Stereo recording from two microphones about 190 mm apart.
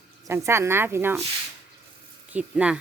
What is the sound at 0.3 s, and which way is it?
Speech, 15° right (ahead or behind).